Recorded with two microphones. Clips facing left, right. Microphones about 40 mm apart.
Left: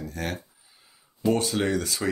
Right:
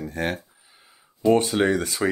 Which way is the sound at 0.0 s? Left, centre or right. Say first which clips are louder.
Right 5 dB; right.